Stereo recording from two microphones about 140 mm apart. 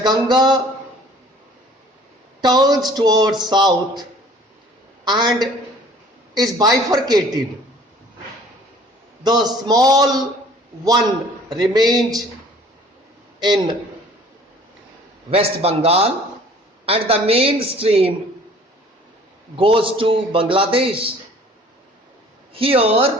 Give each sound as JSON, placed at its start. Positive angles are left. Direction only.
{"t": 0.0, "sound": "a man's voice", "side_deg": -30}
{"t": 2.4, "sound": "speech", "side_deg": -30}
{"t": 5.0, "sound": "speech", "side_deg": -30}
{"t": 9.2, "sound": "speech", "side_deg": -30}
{"t": 11.5, "sound": "speech", "side_deg": -30}
{"t": 15.3, "sound": "speech", "side_deg": -45}
{"t": 19.5, "sound": "a man's voice", "side_deg": -40}
{"t": 22.5, "sound": "speech", "side_deg": -40}